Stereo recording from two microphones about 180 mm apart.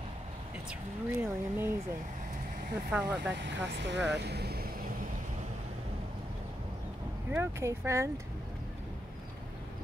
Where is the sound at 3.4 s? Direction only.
75° right (ahead or behind); by 4.9 s 60° right (ahead or behind).